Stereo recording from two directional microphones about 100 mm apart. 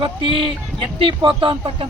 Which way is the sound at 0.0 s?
60° right (ahead or behind).